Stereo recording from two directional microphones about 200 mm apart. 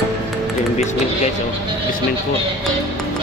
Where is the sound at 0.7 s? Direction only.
35° left (ahead or behind).